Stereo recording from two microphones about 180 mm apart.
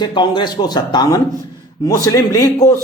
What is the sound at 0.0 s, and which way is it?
A man's voice, 25° left (ahead or behind).